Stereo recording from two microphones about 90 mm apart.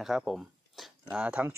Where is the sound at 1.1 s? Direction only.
20° right (ahead or behind).